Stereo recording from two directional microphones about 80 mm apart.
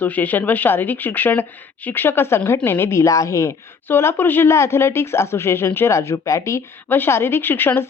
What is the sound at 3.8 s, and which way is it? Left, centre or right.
Speech, left.